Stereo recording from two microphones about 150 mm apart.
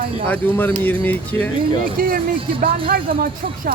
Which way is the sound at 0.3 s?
10° left (ahead or behind).